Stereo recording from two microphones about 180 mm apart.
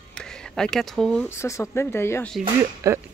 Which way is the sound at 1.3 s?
15° left (ahead or behind).